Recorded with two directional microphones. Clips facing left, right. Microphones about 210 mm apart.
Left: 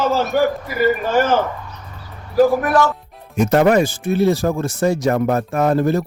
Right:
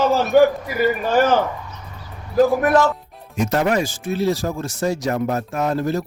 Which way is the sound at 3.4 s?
55° left (ahead or behind).